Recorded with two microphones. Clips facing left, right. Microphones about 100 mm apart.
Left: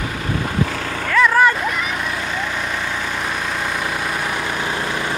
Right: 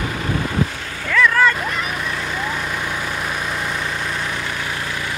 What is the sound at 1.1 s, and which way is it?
Vehicle, 20° left (ahead or behind).